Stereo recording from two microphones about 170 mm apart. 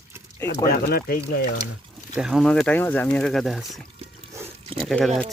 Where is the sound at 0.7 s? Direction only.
60° left (ahead or behind).